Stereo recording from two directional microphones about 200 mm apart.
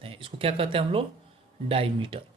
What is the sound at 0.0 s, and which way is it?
Speech, 25° right (ahead or behind).